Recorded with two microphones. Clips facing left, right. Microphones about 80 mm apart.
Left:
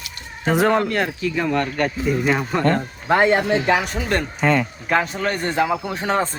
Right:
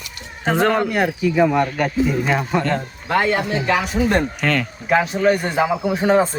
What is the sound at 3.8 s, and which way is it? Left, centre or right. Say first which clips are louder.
Speech: right 4 dB; centre.